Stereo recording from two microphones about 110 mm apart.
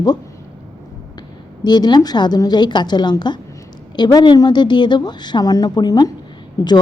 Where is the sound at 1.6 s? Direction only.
40° left (ahead or behind).